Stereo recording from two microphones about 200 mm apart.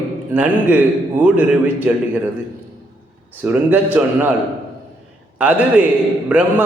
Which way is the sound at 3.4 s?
5° right (ahead or behind).